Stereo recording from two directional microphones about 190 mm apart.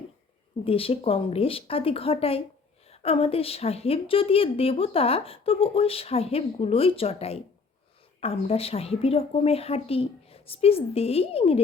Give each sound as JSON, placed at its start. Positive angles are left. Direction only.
{"t": 0.6, "sound": "a woman's voice", "side_deg": 30}